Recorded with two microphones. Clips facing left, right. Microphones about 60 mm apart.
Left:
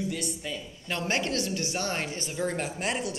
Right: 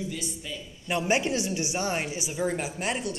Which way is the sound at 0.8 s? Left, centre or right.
Centre.